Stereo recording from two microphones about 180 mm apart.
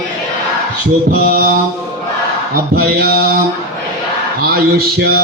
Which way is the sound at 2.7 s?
60° right (ahead or behind).